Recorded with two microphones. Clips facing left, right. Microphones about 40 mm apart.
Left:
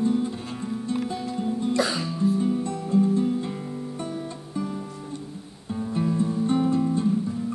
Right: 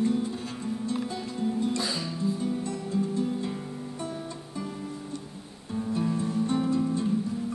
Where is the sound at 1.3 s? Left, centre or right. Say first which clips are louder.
Even; centre.